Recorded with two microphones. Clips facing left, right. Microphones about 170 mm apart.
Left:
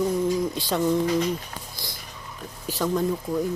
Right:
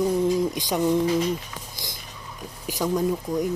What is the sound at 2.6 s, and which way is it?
Speech, 10° right (ahead or behind).